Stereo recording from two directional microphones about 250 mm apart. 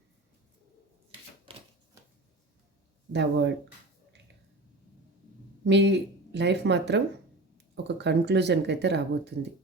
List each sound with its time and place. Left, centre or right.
1.5 s typewriter: right
3.1 s speech: right
5.6 s speech: right